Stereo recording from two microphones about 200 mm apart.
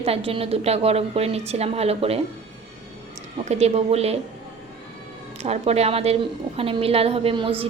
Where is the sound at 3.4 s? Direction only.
35° right (ahead or behind).